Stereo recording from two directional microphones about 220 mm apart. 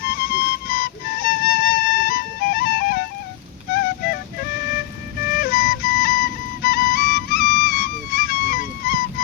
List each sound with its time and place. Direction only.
0.0 s flute: 40° left (ahead or behind)
4.0 s music: 45° left (ahead or behind)
5.2 s music: 40° left (ahead or behind)